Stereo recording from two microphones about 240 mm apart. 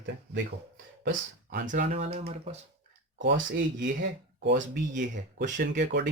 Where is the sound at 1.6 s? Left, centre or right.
Right.